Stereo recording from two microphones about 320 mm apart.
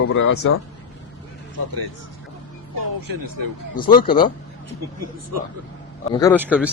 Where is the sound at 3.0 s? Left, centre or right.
Right.